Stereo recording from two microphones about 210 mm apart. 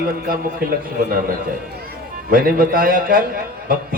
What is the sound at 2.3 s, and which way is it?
Speech, 45° right (ahead or behind).